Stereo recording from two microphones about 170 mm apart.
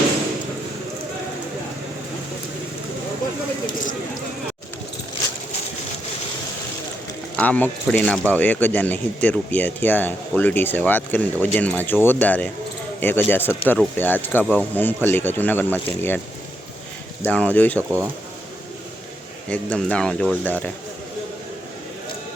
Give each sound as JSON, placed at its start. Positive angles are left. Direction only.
{"t": 7.3, "sound": "speech", "side_deg": 10}
{"t": 17.2, "sound": "speech", "side_deg": 10}
{"t": 17.7, "sound": "speech", "side_deg": -15}
{"t": 19.5, "sound": "speech", "side_deg": 5}